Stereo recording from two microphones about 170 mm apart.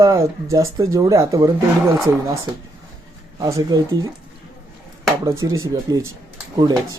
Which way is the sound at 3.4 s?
20° right (ahead or behind).